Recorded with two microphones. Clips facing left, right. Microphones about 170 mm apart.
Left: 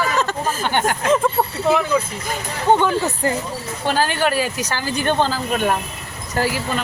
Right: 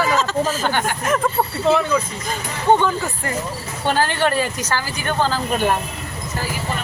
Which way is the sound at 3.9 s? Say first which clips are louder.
Even; 15° left (ahead or behind).